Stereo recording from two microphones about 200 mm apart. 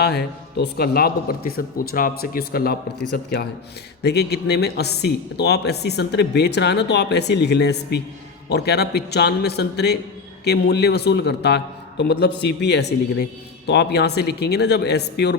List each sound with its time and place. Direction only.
0.0 s speech: 55° left (ahead or behind)
4.0 s speech: 55° left (ahead or behind)